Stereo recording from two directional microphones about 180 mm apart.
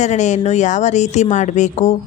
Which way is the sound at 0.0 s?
40° left (ahead or behind).